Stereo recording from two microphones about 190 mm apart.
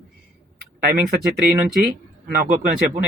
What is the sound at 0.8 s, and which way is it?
Speech, 45° right (ahead or behind).